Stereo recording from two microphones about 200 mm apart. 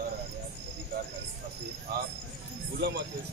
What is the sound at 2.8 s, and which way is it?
Speech, 60° right (ahead or behind).